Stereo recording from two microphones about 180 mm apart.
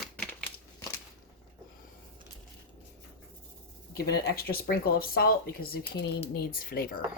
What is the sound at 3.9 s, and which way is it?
Speech, 60° left (ahead or behind).